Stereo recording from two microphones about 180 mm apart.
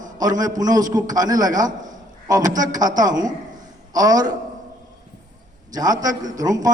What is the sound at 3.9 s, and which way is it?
Speech, 20° right (ahead or behind).